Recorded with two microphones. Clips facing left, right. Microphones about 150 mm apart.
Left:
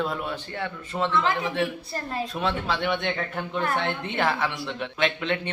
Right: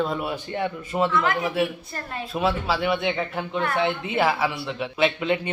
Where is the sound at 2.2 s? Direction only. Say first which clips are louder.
Right 4 dB; 5° right (ahead or behind).